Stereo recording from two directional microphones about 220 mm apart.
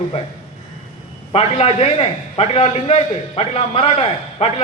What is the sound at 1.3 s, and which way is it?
A man's voice, 25° left (ahead or behind).